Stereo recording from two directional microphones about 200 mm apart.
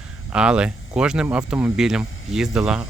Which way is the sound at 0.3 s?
5° right (ahead or behind).